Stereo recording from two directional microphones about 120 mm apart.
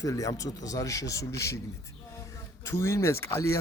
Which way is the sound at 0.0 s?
30° left (ahead or behind).